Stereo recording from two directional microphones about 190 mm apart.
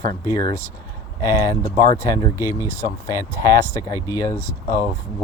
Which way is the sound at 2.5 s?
15° right (ahead or behind).